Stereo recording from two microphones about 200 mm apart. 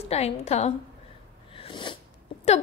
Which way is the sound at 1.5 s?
25° left (ahead or behind).